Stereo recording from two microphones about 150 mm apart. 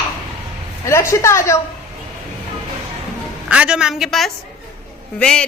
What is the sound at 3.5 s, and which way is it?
A woman's voice, 5° right (ahead or behind).